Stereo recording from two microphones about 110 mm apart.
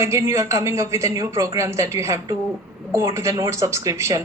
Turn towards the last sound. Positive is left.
turn(degrees=-25)  # may be behind; listen again after turning